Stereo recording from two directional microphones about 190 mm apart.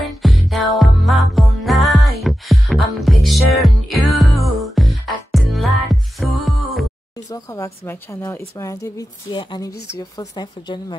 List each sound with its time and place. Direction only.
0.2 s music: centre (ahead or behind)
7.2 s a woman's voice: 15° left (ahead or behind)